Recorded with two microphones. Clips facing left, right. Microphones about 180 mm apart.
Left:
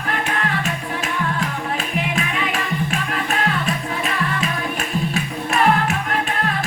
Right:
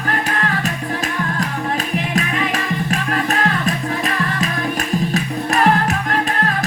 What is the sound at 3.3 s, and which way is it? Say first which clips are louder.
Music: even; 40° right (ahead or behind).